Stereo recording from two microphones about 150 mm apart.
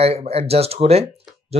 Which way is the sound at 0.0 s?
45° right (ahead or behind).